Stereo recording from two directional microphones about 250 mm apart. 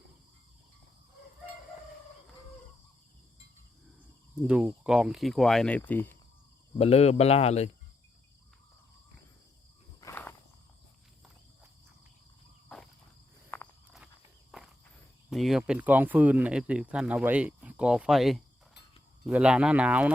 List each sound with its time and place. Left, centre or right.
4.4 s speech: centre
6.7 s speech: left
10.0 s walk: centre
13.5 s walk: centre
15.3 s speech: centre